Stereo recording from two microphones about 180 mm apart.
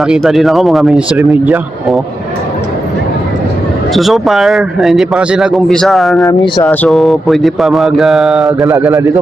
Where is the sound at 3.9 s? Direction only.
Centre (ahead or behind).